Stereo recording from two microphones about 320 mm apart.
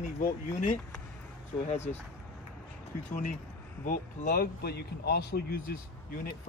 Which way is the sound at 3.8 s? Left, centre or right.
Left.